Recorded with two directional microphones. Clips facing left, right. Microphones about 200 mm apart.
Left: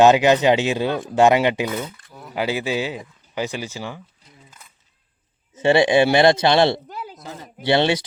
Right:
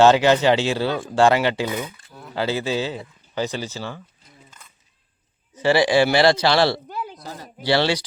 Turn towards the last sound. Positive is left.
turn(degrees=20)  # may be behind; listen again after turning